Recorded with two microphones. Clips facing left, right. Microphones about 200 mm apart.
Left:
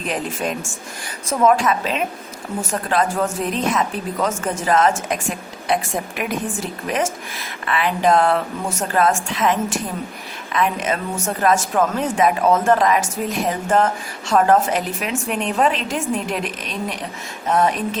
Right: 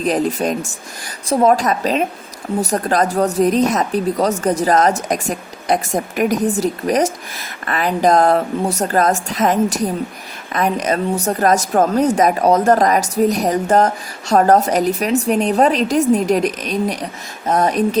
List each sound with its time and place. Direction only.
0.0 s speech: 40° right (ahead or behind)